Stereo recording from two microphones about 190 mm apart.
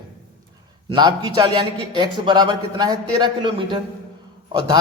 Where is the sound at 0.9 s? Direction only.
20° right (ahead or behind).